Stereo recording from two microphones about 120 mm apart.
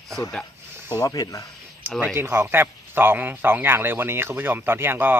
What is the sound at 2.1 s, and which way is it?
A man's voice, 20° right (ahead or behind).